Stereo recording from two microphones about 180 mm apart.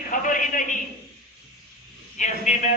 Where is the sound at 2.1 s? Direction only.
40° left (ahead or behind).